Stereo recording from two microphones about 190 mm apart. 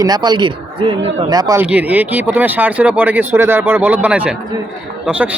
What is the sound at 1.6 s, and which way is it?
A man's voice, 10° right (ahead or behind).